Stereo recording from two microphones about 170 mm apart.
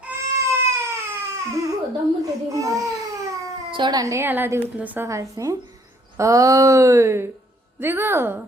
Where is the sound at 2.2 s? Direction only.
20° right (ahead or behind).